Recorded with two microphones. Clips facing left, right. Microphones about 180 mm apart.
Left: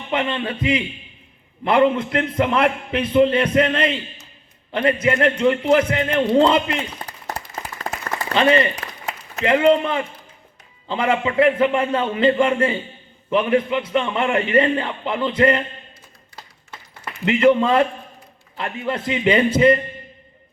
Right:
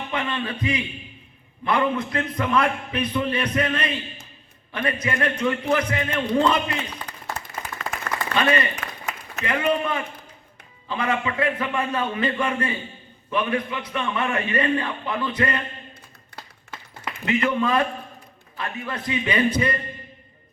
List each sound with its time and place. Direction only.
0.1 s a man's voice: 25° left (ahead or behind)
17.2 s a man's voice: 25° left (ahead or behind)